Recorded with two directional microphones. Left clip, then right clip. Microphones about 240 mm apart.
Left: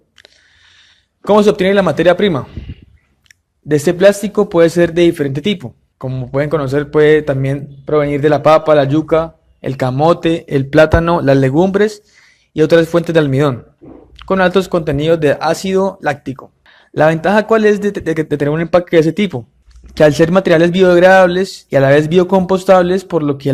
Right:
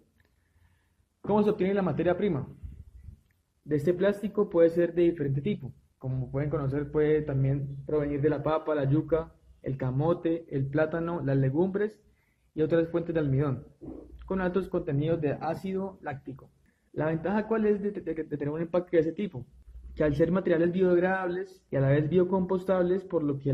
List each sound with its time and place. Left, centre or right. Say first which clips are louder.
1.3 s a man's voice: left 16 dB; left